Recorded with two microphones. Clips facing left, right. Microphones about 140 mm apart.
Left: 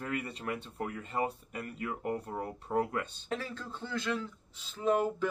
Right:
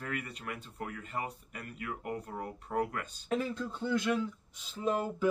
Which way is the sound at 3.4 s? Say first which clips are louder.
Right 6 dB; 15° right (ahead or behind).